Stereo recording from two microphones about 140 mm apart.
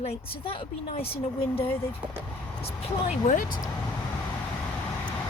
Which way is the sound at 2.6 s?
55° left (ahead or behind).